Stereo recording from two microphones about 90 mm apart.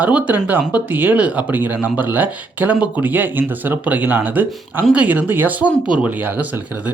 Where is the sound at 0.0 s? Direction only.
15° right (ahead or behind).